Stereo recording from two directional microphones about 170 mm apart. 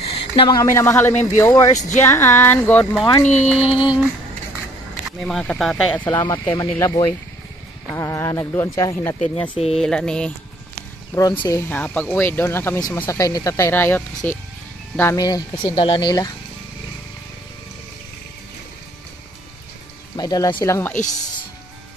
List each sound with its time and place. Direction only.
0.1 s a sound: 30° left (ahead or behind)
0.6 s speech: 15° left (ahead or behind)
3.5 s a sound: 35° left (ahead or behind)
5.2 s speech: 5° left (ahead or behind)
6.0 s speech: 20° left (ahead or behind)
9.8 s speech: 5° left (ahead or behind)
11.1 s speech: 20° left (ahead or behind)
20.2 s speech: 25° left (ahead or behind)